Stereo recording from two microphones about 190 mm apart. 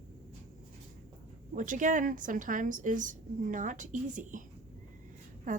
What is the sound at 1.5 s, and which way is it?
A woman's voice, 45° right (ahead or behind).